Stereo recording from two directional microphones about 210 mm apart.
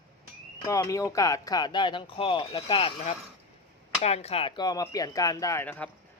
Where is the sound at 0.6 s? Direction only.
15° left (ahead or behind).